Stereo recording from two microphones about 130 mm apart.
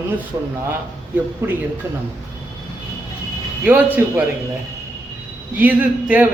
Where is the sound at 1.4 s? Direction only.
15° right (ahead or behind).